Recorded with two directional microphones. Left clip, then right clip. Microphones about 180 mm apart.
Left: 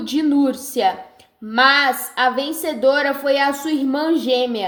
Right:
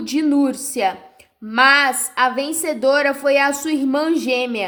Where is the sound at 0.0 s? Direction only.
15° right (ahead or behind).